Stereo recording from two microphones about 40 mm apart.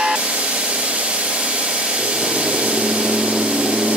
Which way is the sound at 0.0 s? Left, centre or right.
Right.